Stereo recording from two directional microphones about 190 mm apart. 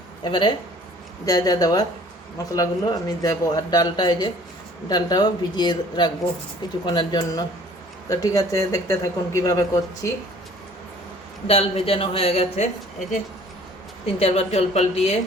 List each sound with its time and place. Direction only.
0.3 s speech: 25° left (ahead or behind)
11.4 s a man's voice: 30° left (ahead or behind)
14.2 s a man's voice: 35° left (ahead or behind)